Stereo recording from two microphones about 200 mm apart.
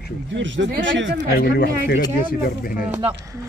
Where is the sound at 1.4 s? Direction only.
50° left (ahead or behind).